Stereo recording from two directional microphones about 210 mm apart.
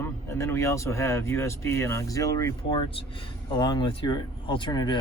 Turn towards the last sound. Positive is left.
turn(degrees=20)  # may be behind; listen again after turning